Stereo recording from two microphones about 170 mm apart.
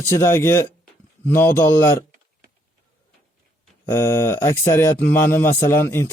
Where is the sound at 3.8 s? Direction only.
15° left (ahead or behind).